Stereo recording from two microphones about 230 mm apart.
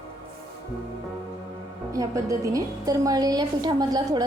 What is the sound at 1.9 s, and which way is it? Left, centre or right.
A woman's voice, centre.